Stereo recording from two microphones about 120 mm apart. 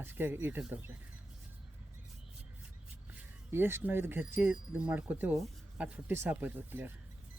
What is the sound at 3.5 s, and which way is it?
Speech, 20° right (ahead or behind).